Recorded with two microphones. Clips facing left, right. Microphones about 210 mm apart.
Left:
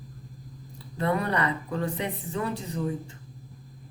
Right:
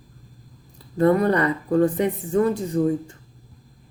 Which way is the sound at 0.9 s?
45° right (ahead or behind).